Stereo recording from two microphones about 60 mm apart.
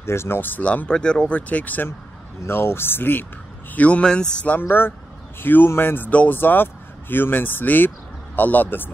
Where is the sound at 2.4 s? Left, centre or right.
Left.